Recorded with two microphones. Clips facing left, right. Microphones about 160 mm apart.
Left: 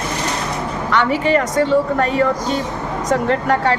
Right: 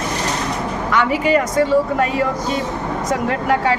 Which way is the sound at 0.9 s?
10° right (ahead or behind).